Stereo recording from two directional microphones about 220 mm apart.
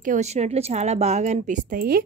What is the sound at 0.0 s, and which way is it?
A woman's voice, 35° right (ahead or behind).